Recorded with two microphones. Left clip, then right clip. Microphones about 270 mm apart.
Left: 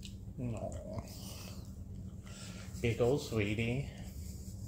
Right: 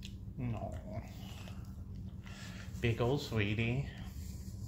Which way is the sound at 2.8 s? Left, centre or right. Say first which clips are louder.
Left 3 dB; right.